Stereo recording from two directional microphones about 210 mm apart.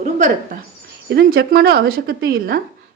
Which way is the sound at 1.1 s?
45° right (ahead or behind).